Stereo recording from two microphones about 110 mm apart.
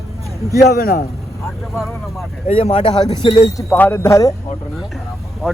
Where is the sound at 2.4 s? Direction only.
65° left (ahead or behind).